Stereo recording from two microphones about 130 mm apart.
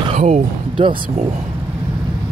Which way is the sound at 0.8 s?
40° right (ahead or behind).